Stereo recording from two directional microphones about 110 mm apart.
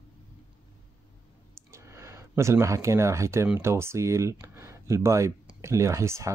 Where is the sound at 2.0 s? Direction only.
25° right (ahead or behind).